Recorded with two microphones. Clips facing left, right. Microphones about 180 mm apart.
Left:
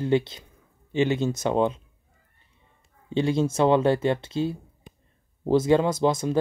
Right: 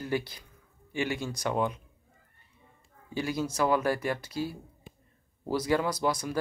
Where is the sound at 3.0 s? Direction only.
25° left (ahead or behind).